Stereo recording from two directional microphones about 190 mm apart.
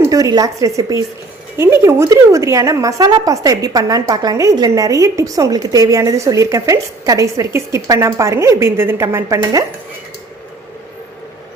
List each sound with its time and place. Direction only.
0.1 s a woman's voice: 20° right (ahead or behind)